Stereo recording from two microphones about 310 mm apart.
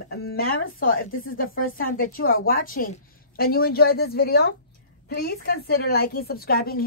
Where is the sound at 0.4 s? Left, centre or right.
Left.